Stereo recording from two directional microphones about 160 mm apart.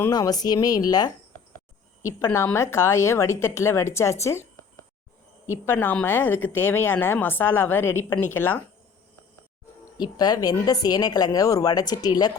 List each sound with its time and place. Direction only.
0.0 s a woman's voice: 25° left (ahead or behind)
5.5 s a woman's voice: 15° left (ahead or behind)
10.0 s a woman's voice: 25° left (ahead or behind)